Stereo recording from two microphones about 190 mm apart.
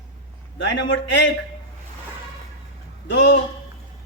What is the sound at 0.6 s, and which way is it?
Speech, 70° left (ahead or behind).